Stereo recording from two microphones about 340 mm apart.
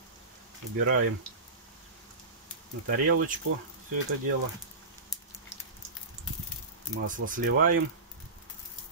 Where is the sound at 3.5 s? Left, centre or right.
Right.